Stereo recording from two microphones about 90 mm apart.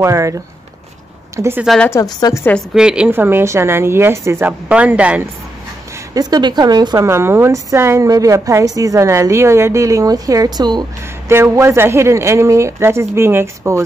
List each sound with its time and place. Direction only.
0.0 s a woman's voice: 35° right (ahead or behind)
2.1 s a woman's voice: 45° left (ahead or behind)
2.7 s a woman's voice: 10° right (ahead or behind)
3.1 s a woman's voice: 25° right (ahead or behind)
4.5 s a woman's voice: 15° right (ahead or behind)
6.1 s a woman's voice: 50° right (ahead or behind)
7.0 s a woman's voice: 30° right (ahead or behind)
8.1 s a woman's voice: 40° right (ahead or behind)
11.2 s a woman's voice: 30° right (ahead or behind)